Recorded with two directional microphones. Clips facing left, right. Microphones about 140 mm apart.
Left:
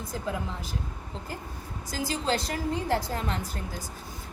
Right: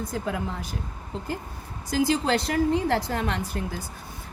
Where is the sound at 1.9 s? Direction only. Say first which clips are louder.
Right 6 dB; 65° right (ahead or behind).